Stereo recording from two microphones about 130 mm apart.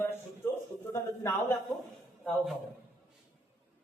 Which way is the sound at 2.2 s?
Centre (ahead or behind).